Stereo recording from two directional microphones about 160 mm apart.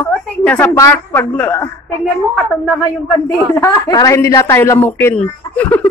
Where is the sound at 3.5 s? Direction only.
20° left (ahead or behind).